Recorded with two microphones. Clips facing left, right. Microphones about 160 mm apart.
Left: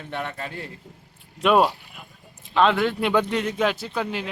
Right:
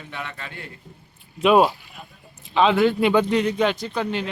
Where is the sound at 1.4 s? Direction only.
Centre (ahead or behind).